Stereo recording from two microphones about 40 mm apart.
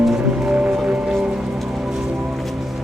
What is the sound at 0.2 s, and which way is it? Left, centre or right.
Music, right.